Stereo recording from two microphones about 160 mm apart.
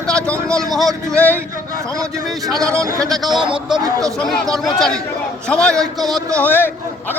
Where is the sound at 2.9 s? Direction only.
Centre (ahead or behind).